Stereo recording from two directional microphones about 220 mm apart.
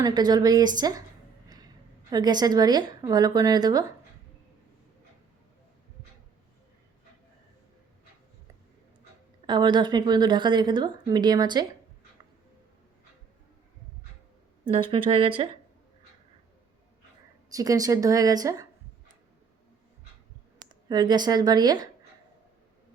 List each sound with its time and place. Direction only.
0.0 s speech: 20° right (ahead or behind)
2.0 s a woman's voice: 20° right (ahead or behind)
9.5 s speech: 20° right (ahead or behind)
14.6 s speech: 25° right (ahead or behind)
17.5 s a woman's voice: 15° right (ahead or behind)
20.7 s speech: 20° right (ahead or behind)